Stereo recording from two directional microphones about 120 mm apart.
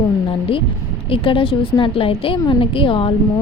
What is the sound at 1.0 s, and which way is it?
A woman's voice, 50° left (ahead or behind).